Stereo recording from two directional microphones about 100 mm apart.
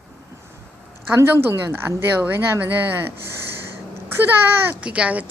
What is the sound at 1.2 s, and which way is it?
Speech, 25° right (ahead or behind).